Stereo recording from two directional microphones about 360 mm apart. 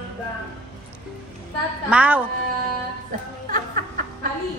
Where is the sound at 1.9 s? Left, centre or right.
Centre.